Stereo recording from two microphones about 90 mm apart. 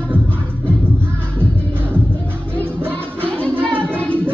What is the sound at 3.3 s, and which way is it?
Music, 10° left (ahead or behind).